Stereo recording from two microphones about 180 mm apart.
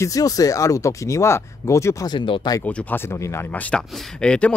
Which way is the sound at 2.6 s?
10° left (ahead or behind).